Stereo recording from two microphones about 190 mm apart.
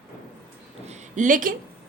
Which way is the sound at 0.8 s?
40° right (ahead or behind).